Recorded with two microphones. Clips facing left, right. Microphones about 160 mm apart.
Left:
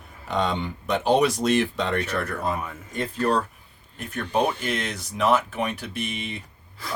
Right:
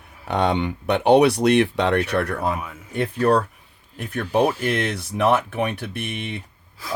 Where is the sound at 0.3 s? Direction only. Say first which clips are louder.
Right 4 dB; 65° right (ahead or behind).